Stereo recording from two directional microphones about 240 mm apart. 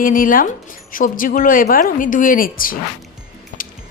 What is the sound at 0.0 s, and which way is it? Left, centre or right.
A woman's voice, left.